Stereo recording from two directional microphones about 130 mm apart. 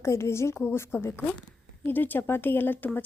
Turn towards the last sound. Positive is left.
turn(degrees=15)  # may be behind; listen again after turning